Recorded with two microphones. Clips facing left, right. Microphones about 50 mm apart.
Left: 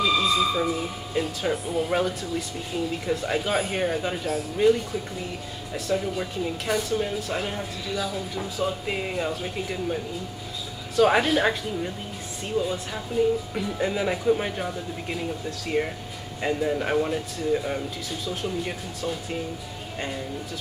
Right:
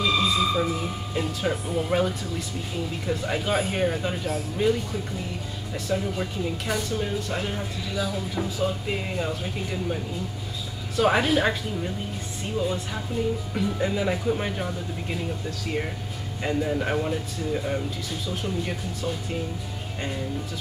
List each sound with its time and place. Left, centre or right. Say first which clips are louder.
0.0 s speech: left 1 dB; centre
5.9 s speech: left 1 dB; centre
11.0 s speech: left 1 dB; centre